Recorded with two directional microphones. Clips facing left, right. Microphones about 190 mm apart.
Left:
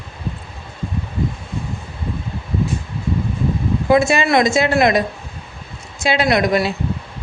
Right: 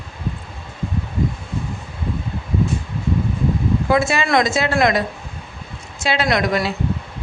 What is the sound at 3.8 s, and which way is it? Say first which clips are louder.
A woman's voice: left 5 dB; 15° left (ahead or behind).